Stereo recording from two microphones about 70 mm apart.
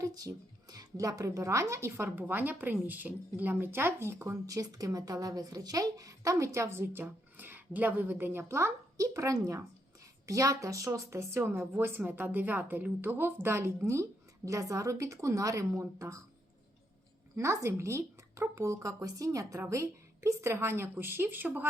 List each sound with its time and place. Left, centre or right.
0.0 s speech: right
2.1 s a woman's voice: right
4.4 s a woman's voice: right
17.3 s a woman's voice: right